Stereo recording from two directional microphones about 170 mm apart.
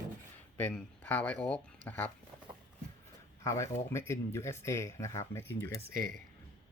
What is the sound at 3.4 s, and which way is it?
Speech, 15° left (ahead or behind).